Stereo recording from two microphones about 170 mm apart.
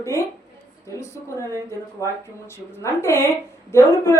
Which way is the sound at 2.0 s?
20° left (ahead or behind).